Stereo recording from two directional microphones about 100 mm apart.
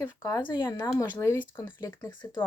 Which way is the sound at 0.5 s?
25° left (ahead or behind).